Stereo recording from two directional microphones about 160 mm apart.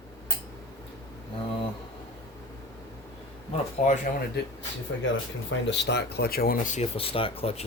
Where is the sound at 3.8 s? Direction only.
50° left (ahead or behind).